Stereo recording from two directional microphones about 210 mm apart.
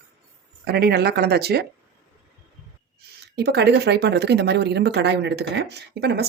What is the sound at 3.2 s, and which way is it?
Speech, 50° right (ahead or behind).